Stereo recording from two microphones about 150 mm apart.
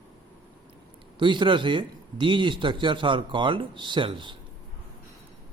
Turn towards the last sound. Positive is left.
turn(degrees=-35)  # may be behind; listen again after turning